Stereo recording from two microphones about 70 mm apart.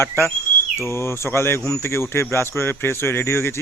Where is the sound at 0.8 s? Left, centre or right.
Left.